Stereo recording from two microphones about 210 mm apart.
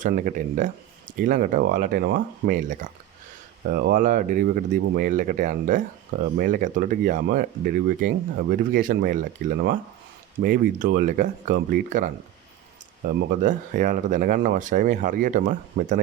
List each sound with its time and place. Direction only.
0.0 s speech: 40° right (ahead or behind)
13.1 s speech: 40° right (ahead or behind)